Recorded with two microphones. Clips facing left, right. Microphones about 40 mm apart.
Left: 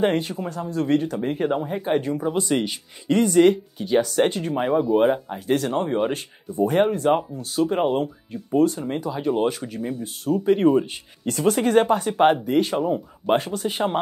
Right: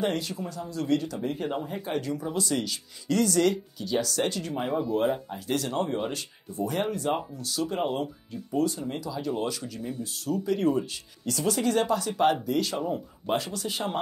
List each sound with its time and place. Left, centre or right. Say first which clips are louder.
0.0 s speech: left 7 dB; left
4.6 s speech: left 8 dB; centre
4.9 s speech: left 7 dB; left